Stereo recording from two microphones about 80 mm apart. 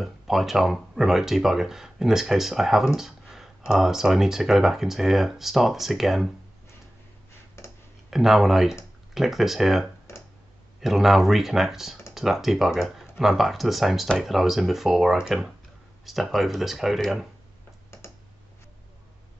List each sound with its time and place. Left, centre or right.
0.0 s speech: centre
7.6 s clicking: left
8.1 s speech: centre